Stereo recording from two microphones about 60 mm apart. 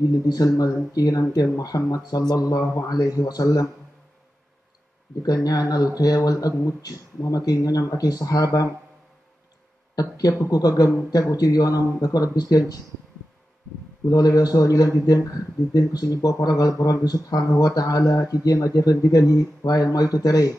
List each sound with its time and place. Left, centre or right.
0.3 s speech: left
5.2 s speech: left
9.9 s speech: left
14.0 s speech: left